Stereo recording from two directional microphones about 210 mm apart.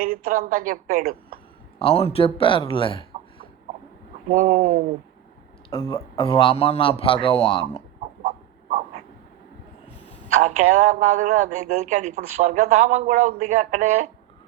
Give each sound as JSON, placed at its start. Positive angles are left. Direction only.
{"t": 0.0, "sound": "speech", "side_deg": -40}
{"t": 1.8, "sound": "a man's voice", "side_deg": 25}
{"t": 4.3, "sound": "speech", "side_deg": -35}
{"t": 5.7, "sound": "a man's voice", "side_deg": 20}
{"t": 10.4, "sound": "speech", "side_deg": -35}